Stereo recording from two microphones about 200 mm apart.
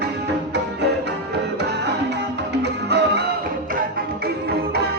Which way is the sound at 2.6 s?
55° right (ahead or behind).